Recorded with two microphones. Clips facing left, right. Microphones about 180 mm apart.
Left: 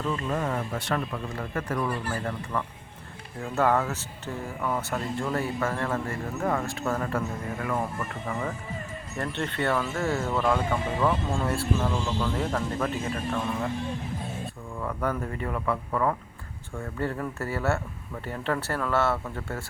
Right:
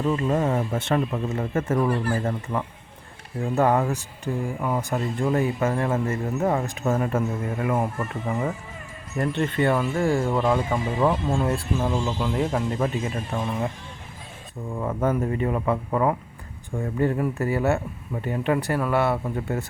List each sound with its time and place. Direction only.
0.0 s speech: 30° right (ahead or behind)
14.8 s speech: 20° right (ahead or behind)